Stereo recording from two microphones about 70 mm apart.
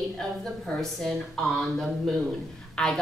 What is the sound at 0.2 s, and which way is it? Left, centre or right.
A woman's voice, centre.